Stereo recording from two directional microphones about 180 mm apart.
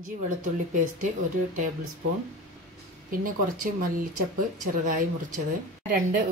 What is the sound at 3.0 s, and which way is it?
Speech, 50° right (ahead or behind).